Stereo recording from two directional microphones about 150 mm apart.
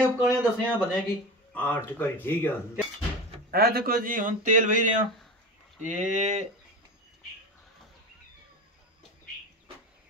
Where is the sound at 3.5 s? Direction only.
90° right; by 6.4 s 55° right (ahead or behind).